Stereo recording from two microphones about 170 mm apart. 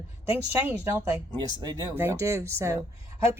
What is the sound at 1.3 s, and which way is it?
A woman's voice, 25° right (ahead or behind).